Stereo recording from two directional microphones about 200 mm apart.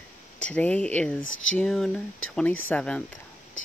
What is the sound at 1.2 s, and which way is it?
Speech, 75° left (ahead or behind).